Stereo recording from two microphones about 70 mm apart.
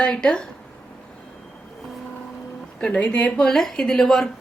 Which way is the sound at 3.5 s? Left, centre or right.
Centre.